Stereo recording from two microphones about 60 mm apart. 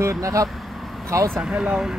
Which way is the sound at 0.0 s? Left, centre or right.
Right.